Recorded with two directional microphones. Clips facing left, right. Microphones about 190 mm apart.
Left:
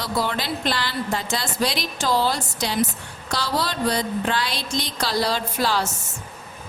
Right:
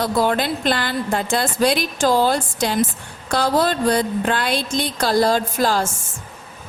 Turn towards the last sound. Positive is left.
turn(degrees=-45)  # may be behind; listen again after turning